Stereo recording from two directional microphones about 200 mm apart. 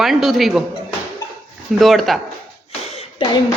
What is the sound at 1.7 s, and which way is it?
Speech, centre (ahead or behind).